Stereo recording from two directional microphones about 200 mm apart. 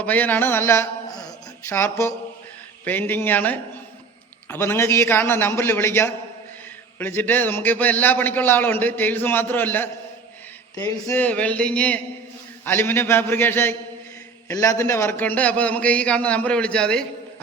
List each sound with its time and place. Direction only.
0.0 s a man's voice: 10° left (ahead or behind)
11.2 s a man's voice: 5° left (ahead or behind)